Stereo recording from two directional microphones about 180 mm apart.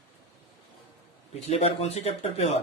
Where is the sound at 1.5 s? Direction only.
35° left (ahead or behind).